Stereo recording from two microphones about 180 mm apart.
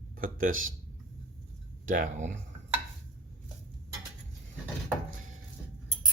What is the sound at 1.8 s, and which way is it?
Speech, 50° right (ahead or behind).